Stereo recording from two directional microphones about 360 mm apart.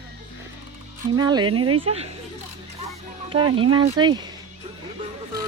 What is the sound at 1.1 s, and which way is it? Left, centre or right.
Speech, centre.